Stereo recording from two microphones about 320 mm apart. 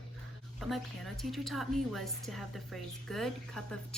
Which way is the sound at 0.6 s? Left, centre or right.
Centre.